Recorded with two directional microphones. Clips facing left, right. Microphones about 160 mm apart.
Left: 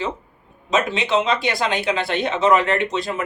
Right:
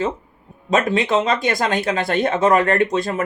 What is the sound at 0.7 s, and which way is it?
Speech, 50° right (ahead or behind).